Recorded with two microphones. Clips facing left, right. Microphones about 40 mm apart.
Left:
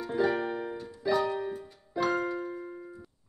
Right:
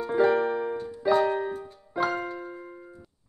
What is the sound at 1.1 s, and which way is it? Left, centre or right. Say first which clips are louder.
Music: right 5 dB; right.